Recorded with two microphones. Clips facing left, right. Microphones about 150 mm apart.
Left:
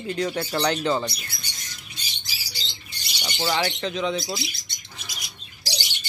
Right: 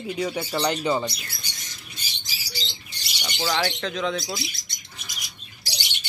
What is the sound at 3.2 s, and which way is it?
Speech, 10° left (ahead or behind).